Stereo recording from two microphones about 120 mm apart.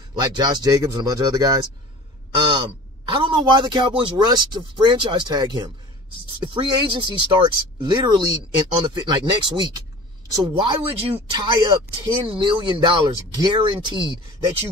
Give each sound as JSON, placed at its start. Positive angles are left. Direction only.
{"t": 0.4, "sound": "speech", "side_deg": -35}
{"t": 3.1, "sound": "speech", "side_deg": -45}